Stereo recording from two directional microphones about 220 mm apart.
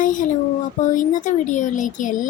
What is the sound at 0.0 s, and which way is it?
Speech, 35° left (ahead or behind).